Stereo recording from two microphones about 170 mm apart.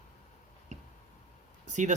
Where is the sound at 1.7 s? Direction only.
45° right (ahead or behind).